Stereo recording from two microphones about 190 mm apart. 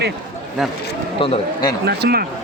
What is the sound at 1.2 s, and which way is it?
Speech, 25° left (ahead or behind).